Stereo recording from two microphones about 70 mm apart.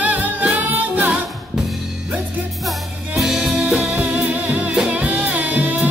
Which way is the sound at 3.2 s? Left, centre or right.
Centre.